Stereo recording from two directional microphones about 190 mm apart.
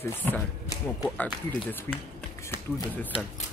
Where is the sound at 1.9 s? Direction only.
15° left (ahead or behind).